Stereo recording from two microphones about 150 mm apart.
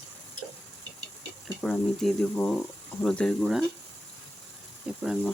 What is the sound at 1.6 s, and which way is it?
Speech, 5° left (ahead or behind).